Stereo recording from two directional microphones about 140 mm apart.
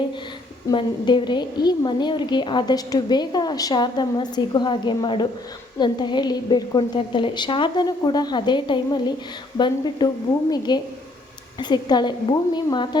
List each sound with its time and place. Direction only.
0.7 s a woman's voice: 35° left (ahead or behind)